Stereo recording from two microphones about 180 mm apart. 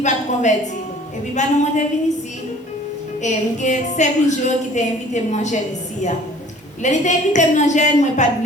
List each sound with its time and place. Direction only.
0.0 s a woman's voice: 40° left (ahead or behind)
3.2 s a woman's voice: 40° left (ahead or behind)